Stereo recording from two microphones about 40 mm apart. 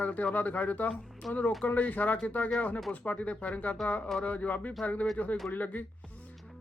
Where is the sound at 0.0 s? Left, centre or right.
Left.